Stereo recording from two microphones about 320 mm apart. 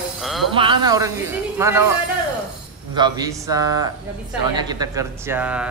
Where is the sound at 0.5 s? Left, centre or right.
Centre.